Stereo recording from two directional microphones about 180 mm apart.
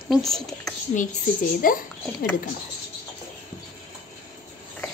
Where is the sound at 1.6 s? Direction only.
50° left (ahead or behind).